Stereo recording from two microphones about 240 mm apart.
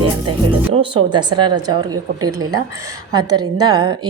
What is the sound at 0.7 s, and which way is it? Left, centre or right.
A woman's voice, right.